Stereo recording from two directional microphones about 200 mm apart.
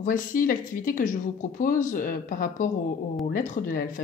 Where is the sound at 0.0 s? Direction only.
45° left (ahead or behind).